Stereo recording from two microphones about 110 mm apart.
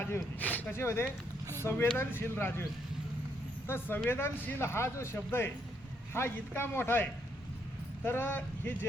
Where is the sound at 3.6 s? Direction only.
20° left (ahead or behind).